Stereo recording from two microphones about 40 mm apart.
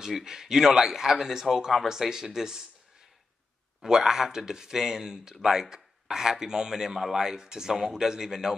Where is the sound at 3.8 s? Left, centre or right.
Centre.